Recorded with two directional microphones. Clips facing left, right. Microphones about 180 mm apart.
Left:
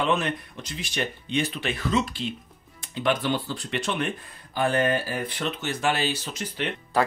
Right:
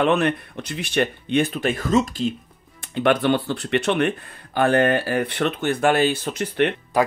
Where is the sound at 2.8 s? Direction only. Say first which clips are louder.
Right 6 dB; 60° right (ahead or behind).